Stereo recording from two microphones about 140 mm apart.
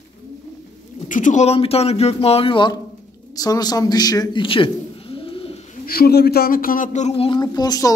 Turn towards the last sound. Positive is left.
turn(degrees=25)  # may be behind; listen again after turning